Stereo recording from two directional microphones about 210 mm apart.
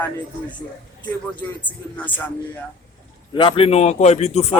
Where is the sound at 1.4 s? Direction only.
5° left (ahead or behind).